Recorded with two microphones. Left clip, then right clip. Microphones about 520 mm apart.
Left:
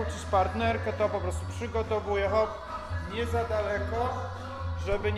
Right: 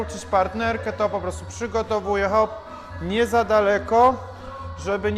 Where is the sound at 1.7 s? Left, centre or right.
Right.